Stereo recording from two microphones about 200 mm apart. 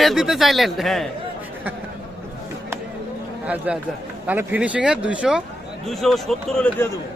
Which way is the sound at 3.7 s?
5° right (ahead or behind).